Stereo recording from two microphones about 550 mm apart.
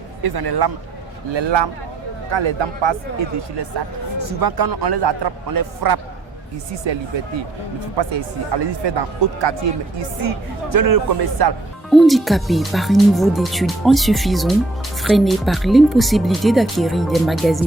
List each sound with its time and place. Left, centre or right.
0.2 s speech: right
7.9 s speech: right
10.0 s speech: right
11.9 s speech: centre